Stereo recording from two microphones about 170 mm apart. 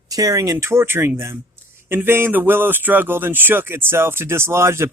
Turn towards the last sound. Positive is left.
turn(degrees=-15)  # may be behind; listen again after turning